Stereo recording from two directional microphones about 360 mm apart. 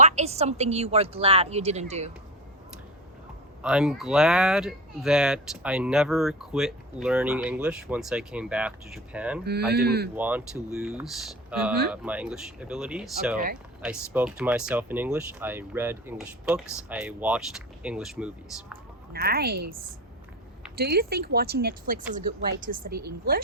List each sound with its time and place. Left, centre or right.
0.0 s a woman's voice: centre
3.6 s speech: centre
9.4 s speech: right
10.2 s speech: centre
19.1 s speech: right
20.7 s speech: right